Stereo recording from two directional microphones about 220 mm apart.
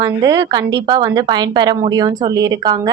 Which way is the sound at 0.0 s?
15° right (ahead or behind).